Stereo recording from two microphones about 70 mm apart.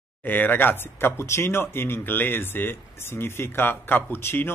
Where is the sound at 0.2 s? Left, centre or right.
Left.